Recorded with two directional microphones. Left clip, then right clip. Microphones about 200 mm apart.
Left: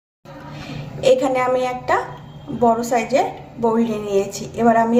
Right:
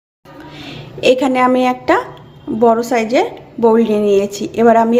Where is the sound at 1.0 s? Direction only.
45° right (ahead or behind).